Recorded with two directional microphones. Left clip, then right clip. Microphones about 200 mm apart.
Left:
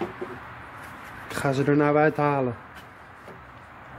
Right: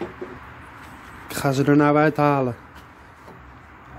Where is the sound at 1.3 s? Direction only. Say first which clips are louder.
Right 3 dB; 15° right (ahead or behind).